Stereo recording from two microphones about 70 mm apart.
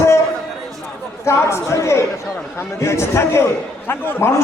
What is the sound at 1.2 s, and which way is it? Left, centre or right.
A man's voice, left.